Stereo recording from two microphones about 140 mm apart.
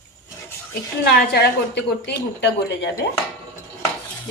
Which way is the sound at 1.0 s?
90° left.